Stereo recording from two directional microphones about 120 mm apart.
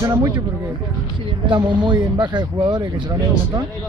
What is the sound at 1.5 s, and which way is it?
Speech, 40° right (ahead or behind).